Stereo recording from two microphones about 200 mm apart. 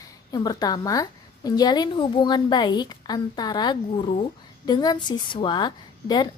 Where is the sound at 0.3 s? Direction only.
20° left (ahead or behind).